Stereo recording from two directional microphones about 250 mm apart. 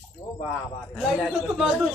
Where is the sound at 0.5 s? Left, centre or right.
Centre.